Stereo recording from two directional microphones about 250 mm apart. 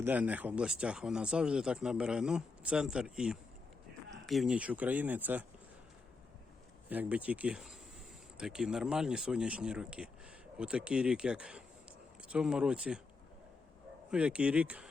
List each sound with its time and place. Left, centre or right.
0.0 s speech: centre
6.9 s speech: centre
14.1 s speech: centre